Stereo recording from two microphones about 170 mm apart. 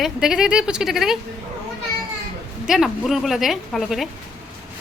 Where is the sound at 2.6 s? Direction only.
Centre (ahead or behind).